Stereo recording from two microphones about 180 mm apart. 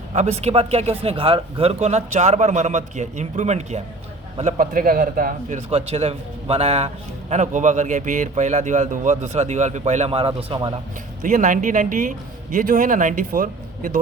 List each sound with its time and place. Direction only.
0.1 s a man's voice: 35° right (ahead or behind)
11.2 s speech: 45° right (ahead or behind)